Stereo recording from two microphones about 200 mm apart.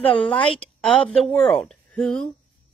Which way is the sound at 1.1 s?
5° left (ahead or behind).